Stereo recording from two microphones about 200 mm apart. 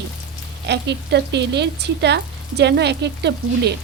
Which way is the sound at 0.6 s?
60° right (ahead or behind).